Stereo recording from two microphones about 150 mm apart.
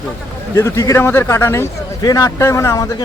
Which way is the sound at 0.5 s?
20° left (ahead or behind).